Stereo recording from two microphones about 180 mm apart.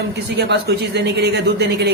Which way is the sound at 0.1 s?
70° right (ahead or behind).